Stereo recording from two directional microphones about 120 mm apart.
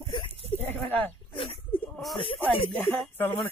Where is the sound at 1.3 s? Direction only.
50° left (ahead or behind).